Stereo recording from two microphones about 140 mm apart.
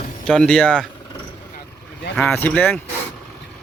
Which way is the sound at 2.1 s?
10° left (ahead or behind).